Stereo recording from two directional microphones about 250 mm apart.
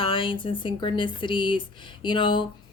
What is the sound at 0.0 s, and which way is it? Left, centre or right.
A woman's voice, left.